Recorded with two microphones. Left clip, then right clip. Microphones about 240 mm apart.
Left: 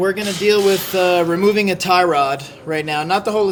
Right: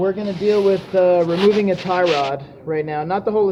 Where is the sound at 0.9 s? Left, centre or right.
Left.